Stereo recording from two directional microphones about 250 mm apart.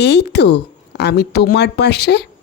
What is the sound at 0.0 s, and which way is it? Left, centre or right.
Speech, left.